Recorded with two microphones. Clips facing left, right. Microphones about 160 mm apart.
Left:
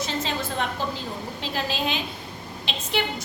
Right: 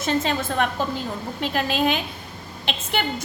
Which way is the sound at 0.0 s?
55° right (ahead or behind).